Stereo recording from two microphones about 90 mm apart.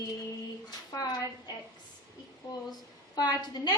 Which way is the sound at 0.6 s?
50° left (ahead or behind).